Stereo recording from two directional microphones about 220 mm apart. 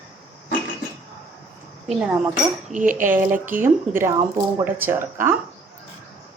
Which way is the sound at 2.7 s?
35° right (ahead or behind).